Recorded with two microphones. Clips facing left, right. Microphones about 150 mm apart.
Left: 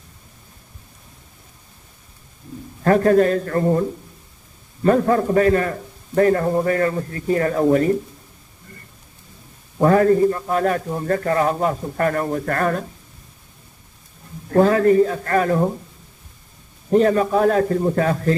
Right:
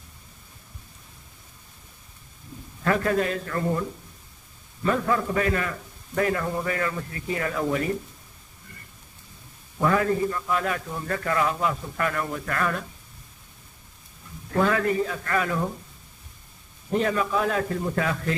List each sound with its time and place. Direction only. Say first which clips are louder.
2.8 s a man's voice: left 9 dB; 40° left (ahead or behind)
4.8 s a man's voice: left 8 dB; 40° left (ahead or behind)
9.8 s a man's voice: left 8 dB; 40° left (ahead or behind)
14.5 s a man's voice: left 9 dB; 35° left (ahead or behind)
16.9 s a man's voice: left 8 dB; 40° left (ahead or behind)